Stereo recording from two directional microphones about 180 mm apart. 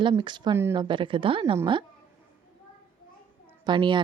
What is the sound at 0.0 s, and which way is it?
Speech, 25° right (ahead or behind).